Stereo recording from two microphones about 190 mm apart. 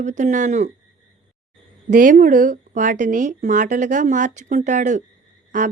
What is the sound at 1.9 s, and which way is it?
A woman's voice, 45° right (ahead or behind).